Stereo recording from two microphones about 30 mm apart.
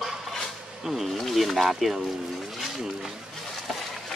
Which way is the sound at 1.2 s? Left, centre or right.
Centre.